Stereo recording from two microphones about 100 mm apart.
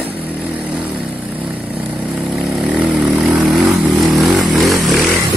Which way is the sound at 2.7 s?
15° right (ahead or behind).